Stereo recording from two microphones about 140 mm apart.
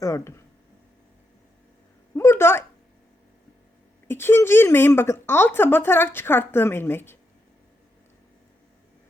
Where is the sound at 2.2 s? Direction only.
15° left (ahead or behind).